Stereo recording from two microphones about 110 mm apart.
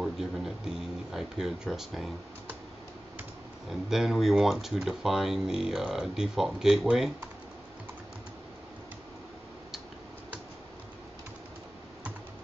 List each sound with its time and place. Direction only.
0.0 s speech: 5° right (ahead or behind)
3.9 s speech: centre (ahead or behind)